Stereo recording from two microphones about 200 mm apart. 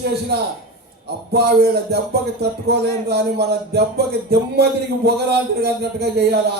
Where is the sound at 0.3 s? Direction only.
55° right (ahead or behind).